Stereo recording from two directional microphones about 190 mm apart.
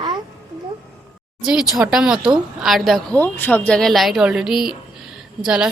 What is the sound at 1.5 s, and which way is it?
Speech, centre (ahead or behind).